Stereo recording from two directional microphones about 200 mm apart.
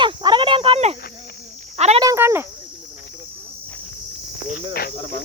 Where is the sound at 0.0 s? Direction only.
25° right (ahead or behind).